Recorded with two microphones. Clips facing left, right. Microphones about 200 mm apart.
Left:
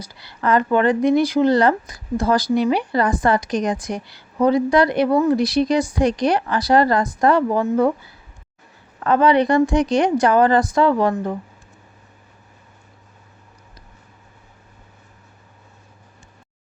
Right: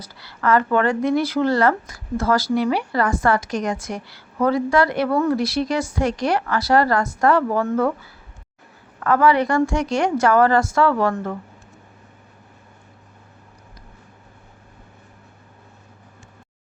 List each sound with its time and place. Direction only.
0.0 s speech: 15° left (ahead or behind)
9.0 s speech: 20° left (ahead or behind)